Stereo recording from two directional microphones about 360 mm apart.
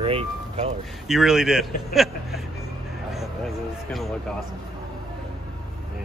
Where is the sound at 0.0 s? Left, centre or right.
Centre.